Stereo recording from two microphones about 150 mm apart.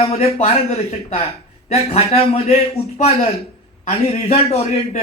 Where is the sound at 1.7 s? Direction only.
45° left (ahead or behind).